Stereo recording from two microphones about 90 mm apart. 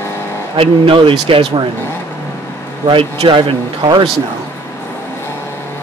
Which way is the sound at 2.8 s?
75° right (ahead or behind).